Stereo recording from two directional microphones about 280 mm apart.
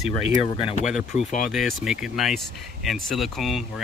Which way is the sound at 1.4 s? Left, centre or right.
Centre.